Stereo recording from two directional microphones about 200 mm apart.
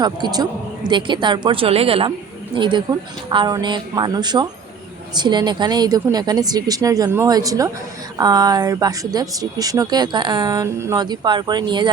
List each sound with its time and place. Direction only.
0.0 s speech: 20° right (ahead or behind)